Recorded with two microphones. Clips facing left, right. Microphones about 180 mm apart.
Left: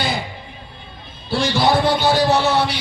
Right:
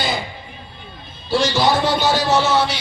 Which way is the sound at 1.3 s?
55° left (ahead or behind).